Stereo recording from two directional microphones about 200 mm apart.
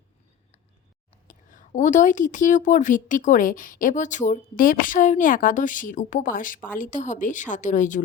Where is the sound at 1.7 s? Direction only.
40° left (ahead or behind).